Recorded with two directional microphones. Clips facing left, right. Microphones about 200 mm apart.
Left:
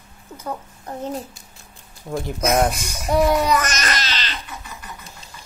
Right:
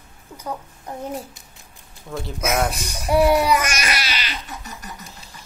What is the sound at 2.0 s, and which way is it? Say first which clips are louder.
Speech: left 4 dB; 20° left (ahead or behind).